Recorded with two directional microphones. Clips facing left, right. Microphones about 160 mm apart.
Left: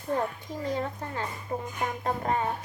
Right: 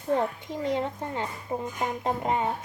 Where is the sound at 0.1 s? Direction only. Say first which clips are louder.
Right 3 dB; 20° right (ahead or behind).